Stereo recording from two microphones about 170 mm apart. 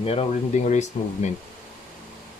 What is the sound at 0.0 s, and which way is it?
Speech, 35° left (ahead or behind).